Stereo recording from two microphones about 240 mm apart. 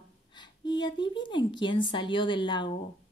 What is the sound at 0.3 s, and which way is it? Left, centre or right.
A woman's voice, centre.